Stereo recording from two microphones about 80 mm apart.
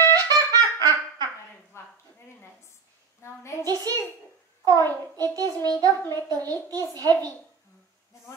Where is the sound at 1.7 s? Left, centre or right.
Left.